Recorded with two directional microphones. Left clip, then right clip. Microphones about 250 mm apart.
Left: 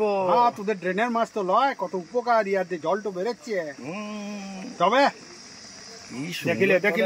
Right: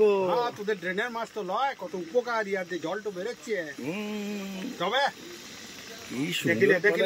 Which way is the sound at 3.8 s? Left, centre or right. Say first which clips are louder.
Even; centre.